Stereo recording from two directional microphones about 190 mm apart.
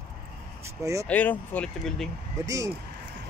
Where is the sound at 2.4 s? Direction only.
15° right (ahead or behind).